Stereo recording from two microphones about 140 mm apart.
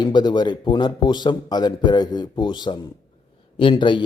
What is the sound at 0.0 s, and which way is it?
Speech, 30° left (ahead or behind).